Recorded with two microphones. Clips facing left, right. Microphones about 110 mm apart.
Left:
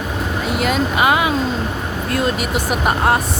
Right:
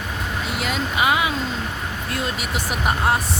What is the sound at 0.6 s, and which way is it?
Speech, 50° left (ahead or behind).